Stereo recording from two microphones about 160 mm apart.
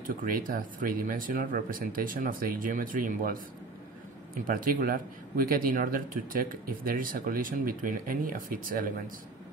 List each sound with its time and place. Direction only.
0.2 s speech: 60° right (ahead or behind)
4.5 s speech: 60° right (ahead or behind)